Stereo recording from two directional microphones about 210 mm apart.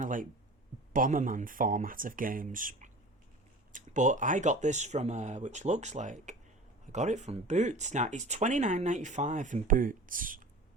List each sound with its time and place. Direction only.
0.0 s speech: 40° right (ahead or behind)